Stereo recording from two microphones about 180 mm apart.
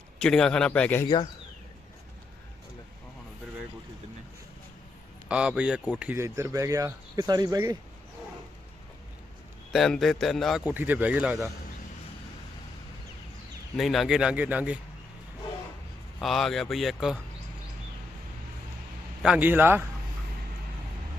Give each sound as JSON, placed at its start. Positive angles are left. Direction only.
{"t": 0.2, "sound": "a man's voice", "side_deg": 5}
{"t": 1.0, "sound": "speech", "side_deg": 20}
{"t": 5.3, "sound": "speech", "side_deg": -5}
{"t": 9.7, "sound": "a man's voice", "side_deg": 0}
{"t": 13.7, "sound": "a man's voice", "side_deg": 0}
{"t": 16.2, "sound": "a man's voice", "side_deg": 0}
{"t": 19.2, "sound": "speech", "side_deg": -5}